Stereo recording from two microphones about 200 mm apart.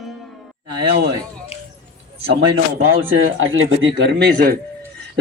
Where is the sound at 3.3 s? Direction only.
80° right; by 4.5 s 50° right (ahead or behind).